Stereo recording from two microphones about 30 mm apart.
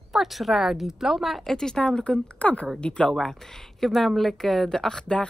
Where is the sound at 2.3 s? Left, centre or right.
Left.